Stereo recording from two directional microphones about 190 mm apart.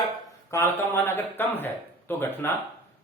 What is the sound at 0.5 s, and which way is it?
Speech, 10° left (ahead or behind).